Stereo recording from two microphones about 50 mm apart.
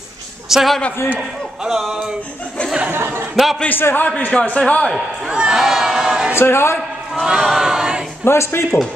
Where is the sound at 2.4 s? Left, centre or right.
Left.